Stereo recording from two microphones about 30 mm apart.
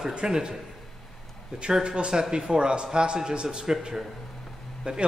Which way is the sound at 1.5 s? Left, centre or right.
Right.